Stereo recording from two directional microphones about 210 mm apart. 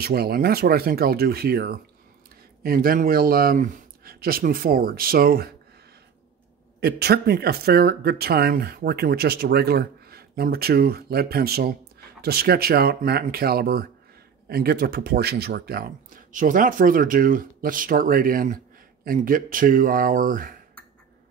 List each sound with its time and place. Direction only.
0.0 s speech: 45° right (ahead or behind)
6.8 s speech: 50° right (ahead or behind)